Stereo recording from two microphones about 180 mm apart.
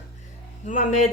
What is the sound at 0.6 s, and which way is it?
Speech, 40° left (ahead or behind).